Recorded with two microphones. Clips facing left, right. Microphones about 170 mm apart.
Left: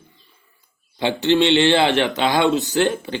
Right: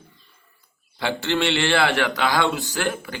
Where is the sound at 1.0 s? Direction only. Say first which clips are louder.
Left 6 dB; 20° left (ahead or behind).